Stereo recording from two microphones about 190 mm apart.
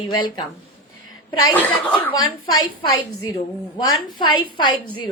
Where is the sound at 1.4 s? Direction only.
10° left (ahead or behind).